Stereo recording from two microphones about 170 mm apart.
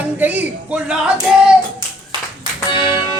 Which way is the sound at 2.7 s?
30° left (ahead or behind).